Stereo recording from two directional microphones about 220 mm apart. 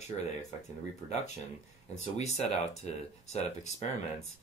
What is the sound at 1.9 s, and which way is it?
Speech, 30° left (ahead or behind).